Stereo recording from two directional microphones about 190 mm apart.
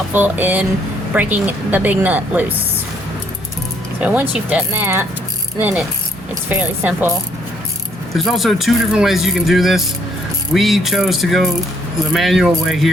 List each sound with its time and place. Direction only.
0.1 s a woman's voice: 10° right (ahead or behind)
4.0 s a woman's voice: 10° right (ahead or behind)
8.1 s speech: centre (ahead or behind)